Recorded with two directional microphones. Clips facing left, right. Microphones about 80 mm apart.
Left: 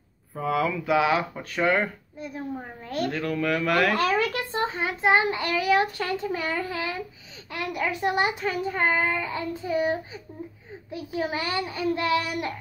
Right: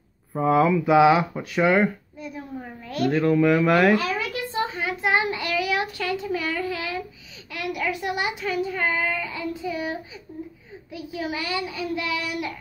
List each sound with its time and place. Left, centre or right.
0.4 s mantra: right
1.3 s speech: centre
2.1 s a sound: left
3.1 s mantra: right
3.9 s a sound: left
4.4 s a child's voice: left